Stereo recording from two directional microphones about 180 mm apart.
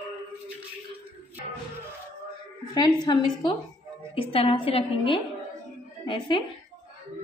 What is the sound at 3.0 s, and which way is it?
A woman's voice, 25° left (ahead or behind).